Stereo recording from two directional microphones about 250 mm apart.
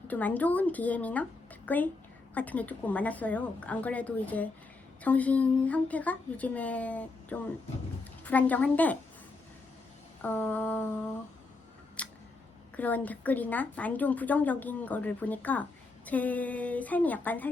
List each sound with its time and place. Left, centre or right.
0.1 s a woman's voice: centre
10.2 s a woman's voice: centre
12.0 s camera: centre
12.7 s a woman's voice: centre